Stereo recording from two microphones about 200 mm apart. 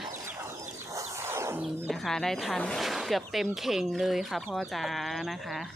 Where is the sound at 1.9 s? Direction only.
Centre (ahead or behind).